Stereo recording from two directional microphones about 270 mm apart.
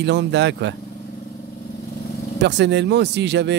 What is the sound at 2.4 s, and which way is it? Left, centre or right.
Speech, right.